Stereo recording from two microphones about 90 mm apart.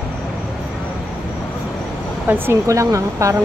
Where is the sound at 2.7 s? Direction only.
35° right (ahead or behind).